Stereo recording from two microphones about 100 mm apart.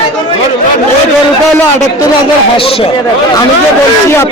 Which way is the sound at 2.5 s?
70° left (ahead or behind).